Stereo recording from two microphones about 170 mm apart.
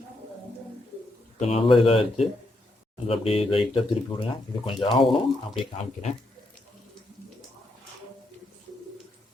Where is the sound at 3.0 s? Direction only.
35° left (ahead or behind).